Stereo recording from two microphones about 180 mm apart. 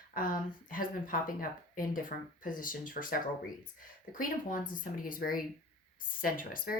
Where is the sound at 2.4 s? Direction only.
50° left (ahead or behind).